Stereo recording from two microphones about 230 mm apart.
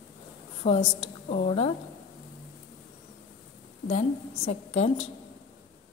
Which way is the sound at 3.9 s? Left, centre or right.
Left.